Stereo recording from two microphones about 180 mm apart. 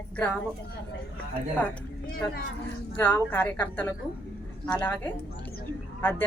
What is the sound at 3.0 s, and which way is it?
Speech, 10° left (ahead or behind).